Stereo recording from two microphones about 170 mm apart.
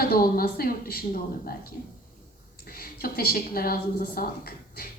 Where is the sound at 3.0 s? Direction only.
60° left (ahead or behind).